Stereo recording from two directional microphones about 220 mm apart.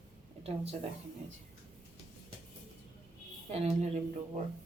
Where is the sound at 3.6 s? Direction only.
30° right (ahead or behind).